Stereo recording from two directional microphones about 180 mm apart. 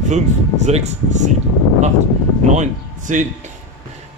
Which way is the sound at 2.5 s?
45° right (ahead or behind).